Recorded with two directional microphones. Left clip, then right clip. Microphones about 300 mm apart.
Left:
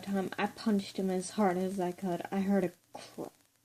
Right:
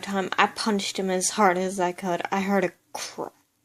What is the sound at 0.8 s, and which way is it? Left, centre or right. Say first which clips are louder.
Speech: right 9 dB; centre.